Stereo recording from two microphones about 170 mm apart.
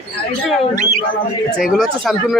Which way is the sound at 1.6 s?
Centre (ahead or behind).